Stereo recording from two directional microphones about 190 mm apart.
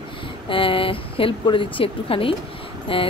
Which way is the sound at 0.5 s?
25° left (ahead or behind).